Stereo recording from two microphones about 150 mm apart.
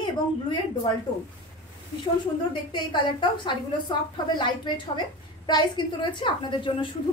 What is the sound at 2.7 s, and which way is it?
Speech, 30° left (ahead or behind).